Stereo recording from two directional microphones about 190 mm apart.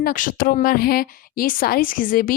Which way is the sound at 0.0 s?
45° left (ahead or behind).